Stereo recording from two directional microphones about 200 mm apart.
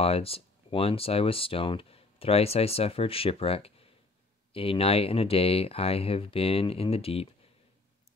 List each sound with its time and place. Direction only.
0.0 s speech: 30° left (ahead or behind)